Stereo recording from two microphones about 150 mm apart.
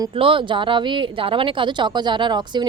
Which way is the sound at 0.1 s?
35° right (ahead or behind).